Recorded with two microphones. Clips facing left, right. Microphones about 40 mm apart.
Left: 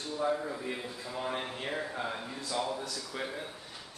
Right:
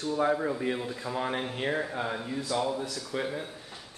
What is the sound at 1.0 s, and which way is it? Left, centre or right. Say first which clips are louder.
Speech: right 5 dB; right.